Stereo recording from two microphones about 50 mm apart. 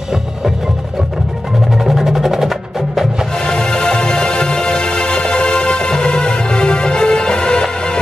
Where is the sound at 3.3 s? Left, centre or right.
Centre.